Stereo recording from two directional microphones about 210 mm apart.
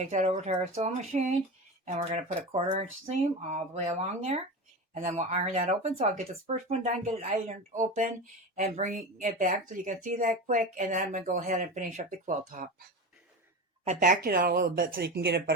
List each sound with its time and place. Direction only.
0.0 s speech: 35° right (ahead or behind)
13.8 s speech: 35° right (ahead or behind); by 15.5 s 55° right (ahead or behind)